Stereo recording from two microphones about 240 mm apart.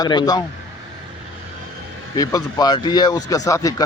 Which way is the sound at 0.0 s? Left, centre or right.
Centre.